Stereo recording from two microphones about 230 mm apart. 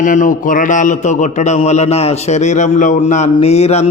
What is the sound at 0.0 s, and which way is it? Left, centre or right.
A man's voice, left.